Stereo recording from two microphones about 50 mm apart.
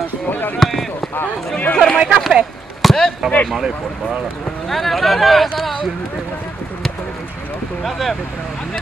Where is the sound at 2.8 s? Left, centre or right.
Centre.